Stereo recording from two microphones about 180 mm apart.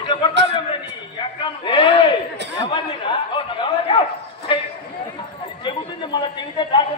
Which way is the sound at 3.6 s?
25° left (ahead or behind).